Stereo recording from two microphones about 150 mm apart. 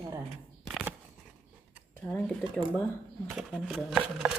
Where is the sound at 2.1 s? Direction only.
5° left (ahead or behind).